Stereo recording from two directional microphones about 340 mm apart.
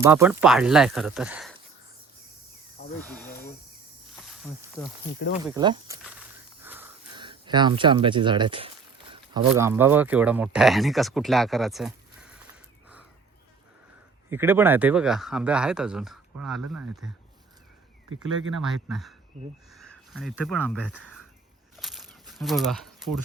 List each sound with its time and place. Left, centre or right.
0.0 s speech: centre
2.8 s snake: left
3.2 s cricket: left
4.1 s snake: centre
5.0 s speech: left
5.5 s speech: centre
6.0 s a sound: centre
9.5 s speech: centre
14.3 s speech: centre
18.6 s speech: centre
21.8 s crumpling: centre